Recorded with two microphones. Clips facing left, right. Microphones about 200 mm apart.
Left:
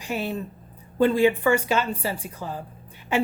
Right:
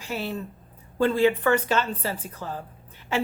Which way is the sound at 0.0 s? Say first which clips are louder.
Left 2 dB; 15° left (ahead or behind).